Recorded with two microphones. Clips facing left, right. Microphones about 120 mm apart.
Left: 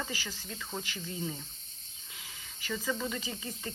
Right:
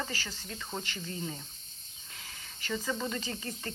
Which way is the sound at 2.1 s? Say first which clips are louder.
Right 1 dB; 5° left (ahead or behind).